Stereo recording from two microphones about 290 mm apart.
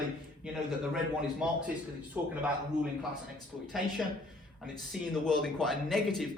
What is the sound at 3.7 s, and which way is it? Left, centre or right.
Speech, centre.